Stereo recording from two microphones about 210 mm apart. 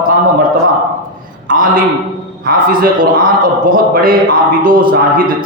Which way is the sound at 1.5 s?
40° right (ahead or behind).